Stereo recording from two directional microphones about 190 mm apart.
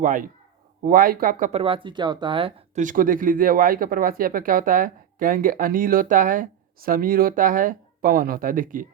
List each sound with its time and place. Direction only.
0.0 s speech: 45° right (ahead or behind)
2.8 s speech: 45° right (ahead or behind)